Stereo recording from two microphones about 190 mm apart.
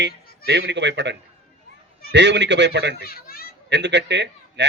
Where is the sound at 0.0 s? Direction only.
65° right (ahead or behind).